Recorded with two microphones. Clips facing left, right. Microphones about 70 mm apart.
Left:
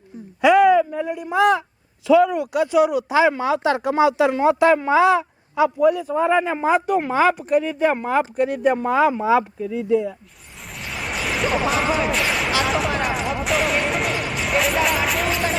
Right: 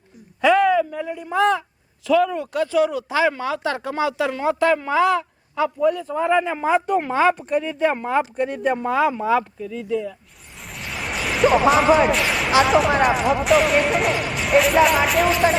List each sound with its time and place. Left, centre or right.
0.4 s speech: centre
10.7 s speech: centre